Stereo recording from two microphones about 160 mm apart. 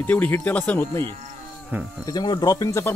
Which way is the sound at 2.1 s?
25° left (ahead or behind).